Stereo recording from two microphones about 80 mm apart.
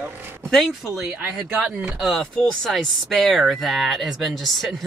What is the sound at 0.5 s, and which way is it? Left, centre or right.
Speech, centre.